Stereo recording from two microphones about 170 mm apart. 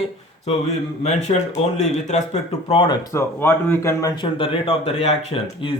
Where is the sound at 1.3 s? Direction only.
30° left (ahead or behind).